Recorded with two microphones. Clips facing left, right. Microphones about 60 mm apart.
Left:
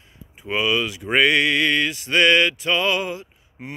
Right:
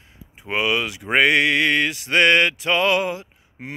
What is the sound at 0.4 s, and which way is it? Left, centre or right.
Speech, right.